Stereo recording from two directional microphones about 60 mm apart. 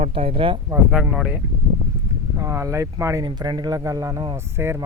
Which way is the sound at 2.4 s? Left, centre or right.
Right.